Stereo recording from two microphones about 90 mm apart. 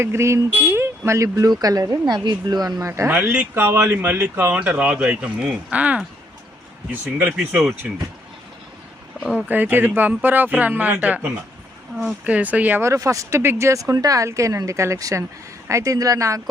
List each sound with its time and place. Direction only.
0.0 s speech: 30° right (ahead or behind)
3.5 s speech: 25° right (ahead or behind)
7.3 s speech: 5° right (ahead or behind)
9.2 s a sound: 10° right (ahead or behind)
9.5 s speech: 20° right (ahead or behind)
12.8 s speech: 35° right (ahead or behind)